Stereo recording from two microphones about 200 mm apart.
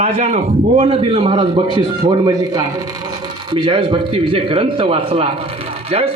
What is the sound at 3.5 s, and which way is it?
Speech, 25° right (ahead or behind).